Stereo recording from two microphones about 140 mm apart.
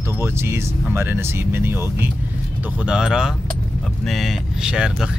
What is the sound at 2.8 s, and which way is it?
Speech, 5° right (ahead or behind).